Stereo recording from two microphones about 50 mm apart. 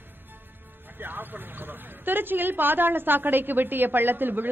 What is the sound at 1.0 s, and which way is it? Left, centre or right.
A woman's voice, right.